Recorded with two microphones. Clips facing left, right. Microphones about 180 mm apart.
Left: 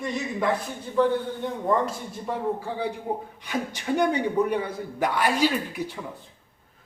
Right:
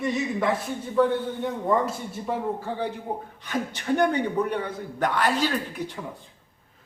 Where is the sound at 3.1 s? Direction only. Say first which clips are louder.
Left 1 dB; 10° left (ahead or behind).